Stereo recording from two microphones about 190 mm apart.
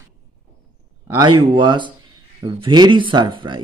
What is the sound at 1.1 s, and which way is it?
A man's voice, 20° right (ahead or behind).